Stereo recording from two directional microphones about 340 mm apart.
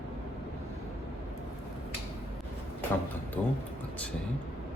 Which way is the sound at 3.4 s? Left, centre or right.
Centre.